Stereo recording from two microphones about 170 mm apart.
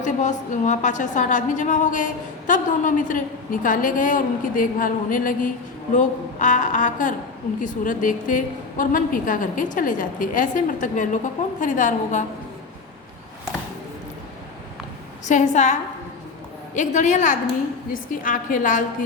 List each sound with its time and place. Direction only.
0.0 s a woman's voice: 45° left (ahead or behind)
15.3 s a woman's voice: 45° left (ahead or behind)